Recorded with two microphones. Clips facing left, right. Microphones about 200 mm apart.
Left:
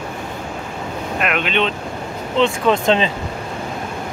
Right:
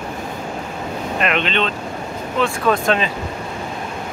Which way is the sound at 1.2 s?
5° left (ahead or behind).